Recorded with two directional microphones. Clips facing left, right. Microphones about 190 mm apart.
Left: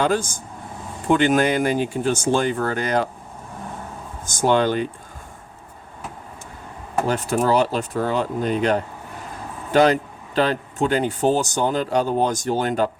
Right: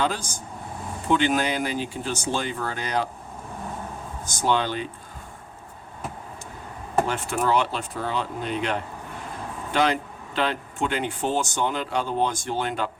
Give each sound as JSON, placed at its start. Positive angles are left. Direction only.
{"t": 0.0, "sound": "speech", "side_deg": 50}
{"t": 4.3, "sound": "speech", "side_deg": 50}
{"t": 7.1, "sound": "speech", "side_deg": 40}